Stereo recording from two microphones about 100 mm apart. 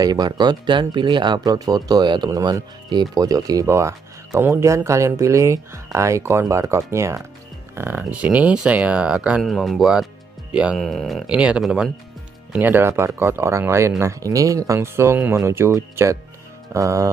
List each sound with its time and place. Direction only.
0.0 s speech: 40° right (ahead or behind); by 9.4 s 10° right (ahead or behind)
9.4 s speech: centre (ahead or behind)
10.8 s speech: centre (ahead or behind)
12.5 s speech: 20° right (ahead or behind)
16.7 s music: 30° right (ahead or behind)